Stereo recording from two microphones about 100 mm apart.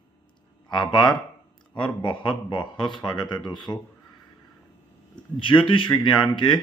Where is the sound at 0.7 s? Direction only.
50° left (ahead or behind).